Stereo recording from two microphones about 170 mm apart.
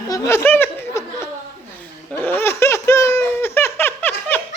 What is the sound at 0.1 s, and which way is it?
Laughter, 20° left (ahead or behind).